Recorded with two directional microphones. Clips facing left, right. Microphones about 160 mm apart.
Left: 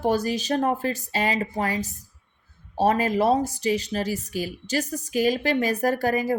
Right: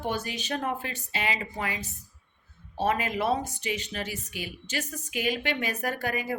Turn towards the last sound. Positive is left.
turn(degrees=40)  # may be behind; listen again after turning